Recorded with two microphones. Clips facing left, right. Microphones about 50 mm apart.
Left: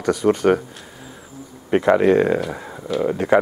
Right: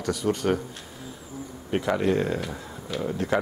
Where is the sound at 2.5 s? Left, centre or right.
Left.